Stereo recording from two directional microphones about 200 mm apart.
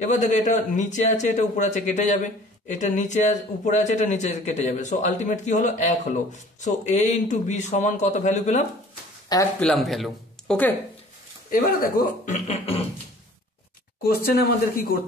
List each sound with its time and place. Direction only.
0.0 s a man's voice: 35° left (ahead or behind)
9.6 s speech: 5° left (ahead or behind)
11.5 s a man's voice: 45° left (ahead or behind)
14.0 s speech: 50° left (ahead or behind)